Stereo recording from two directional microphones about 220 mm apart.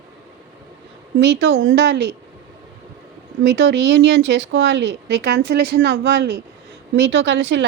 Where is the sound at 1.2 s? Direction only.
50° right (ahead or behind).